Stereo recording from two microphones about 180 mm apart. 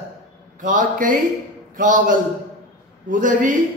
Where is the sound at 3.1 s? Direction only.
45° right (ahead or behind).